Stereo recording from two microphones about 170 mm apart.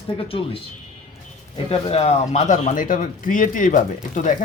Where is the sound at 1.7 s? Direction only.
35° left (ahead or behind).